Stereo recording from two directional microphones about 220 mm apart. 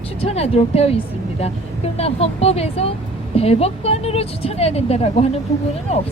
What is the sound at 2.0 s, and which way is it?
A woman's voice, 25° left (ahead or behind).